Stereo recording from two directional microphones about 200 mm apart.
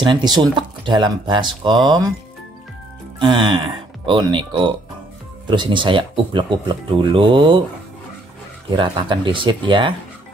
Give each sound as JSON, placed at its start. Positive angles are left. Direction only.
{"t": 0.0, "sound": "speech", "side_deg": -20}
{"t": 3.2, "sound": "speech", "side_deg": -25}
{"t": 8.7, "sound": "speech", "side_deg": -25}